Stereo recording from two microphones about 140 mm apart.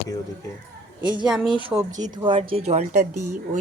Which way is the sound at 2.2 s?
35° right (ahead or behind).